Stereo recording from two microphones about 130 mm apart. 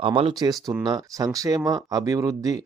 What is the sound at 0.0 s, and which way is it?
Speech, 45° right (ahead or behind).